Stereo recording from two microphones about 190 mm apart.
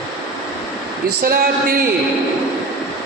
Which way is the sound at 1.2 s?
55° right (ahead or behind).